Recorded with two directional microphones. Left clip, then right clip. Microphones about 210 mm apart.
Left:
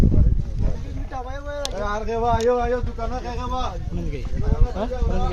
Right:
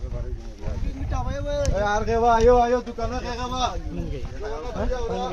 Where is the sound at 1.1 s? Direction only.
50° right (ahead or behind).